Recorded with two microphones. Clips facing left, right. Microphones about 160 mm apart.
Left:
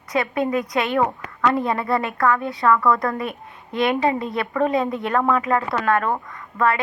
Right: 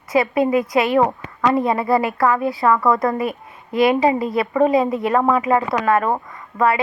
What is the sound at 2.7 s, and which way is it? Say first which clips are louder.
Speech: right 2 dB; 25° right (ahead or behind).